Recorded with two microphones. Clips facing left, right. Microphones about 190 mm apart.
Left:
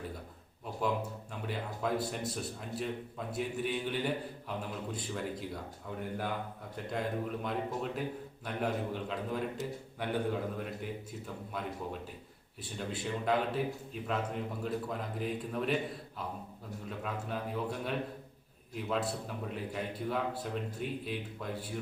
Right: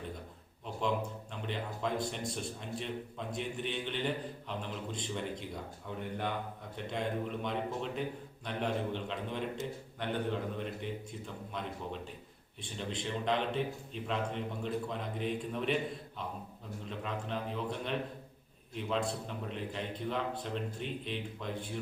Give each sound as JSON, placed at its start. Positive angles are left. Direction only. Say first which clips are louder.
{"t": 1.3, "sound": "a man's voice", "louder": "left 2 dB", "side_deg": 5}
{"t": 12.6, "sound": "a man's voice", "louder": "left 1 dB", "side_deg": 5}
{"t": 16.9, "sound": "a man's voice", "louder": "even", "side_deg": 5}